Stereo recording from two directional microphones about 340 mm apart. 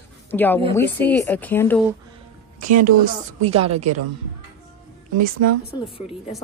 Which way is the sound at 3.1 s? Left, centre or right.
Right.